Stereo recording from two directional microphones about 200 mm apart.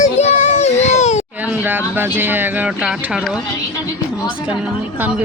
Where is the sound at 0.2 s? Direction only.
35° left (ahead or behind).